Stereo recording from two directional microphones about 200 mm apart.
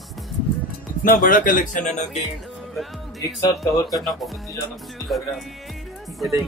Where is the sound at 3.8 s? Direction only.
Centre (ahead or behind).